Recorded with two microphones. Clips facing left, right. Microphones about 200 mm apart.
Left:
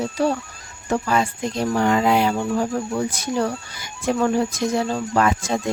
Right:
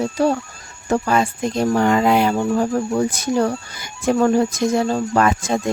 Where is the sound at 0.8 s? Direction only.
45° right (ahead or behind).